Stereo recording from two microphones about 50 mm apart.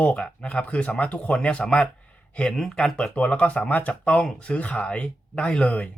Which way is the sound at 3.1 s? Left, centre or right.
Left.